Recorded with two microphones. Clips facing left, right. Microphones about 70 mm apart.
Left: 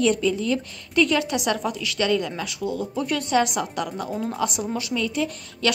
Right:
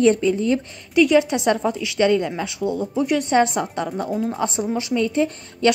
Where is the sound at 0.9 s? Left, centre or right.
Centre.